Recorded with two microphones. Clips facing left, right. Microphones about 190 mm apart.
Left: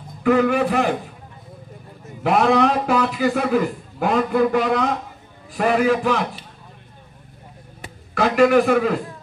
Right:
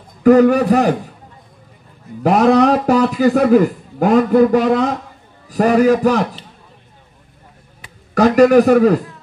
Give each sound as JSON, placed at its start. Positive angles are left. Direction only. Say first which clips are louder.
{"t": 0.2, "sound": "a man's voice", "louder": "right 7 dB", "side_deg": -40}
{"t": 2.2, "sound": "a man's voice", "louder": "right 5 dB", "side_deg": -40}
{"t": 8.1, "sound": "a man's voice", "louder": "right 5 dB", "side_deg": -40}